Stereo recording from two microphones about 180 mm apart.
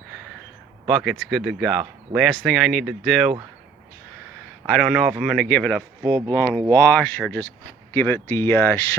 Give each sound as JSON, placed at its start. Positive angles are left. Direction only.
{"t": 0.9, "sound": "speech", "side_deg": 0}
{"t": 4.7, "sound": "speech", "side_deg": 5}
{"t": 6.1, "sound": "speech", "side_deg": -25}
{"t": 6.3, "sound": "speech", "side_deg": 10}